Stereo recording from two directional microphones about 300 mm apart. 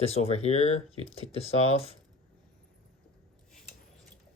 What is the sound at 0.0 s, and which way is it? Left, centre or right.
Speech, centre.